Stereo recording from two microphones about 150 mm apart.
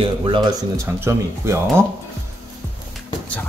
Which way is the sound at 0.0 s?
30° right (ahead or behind).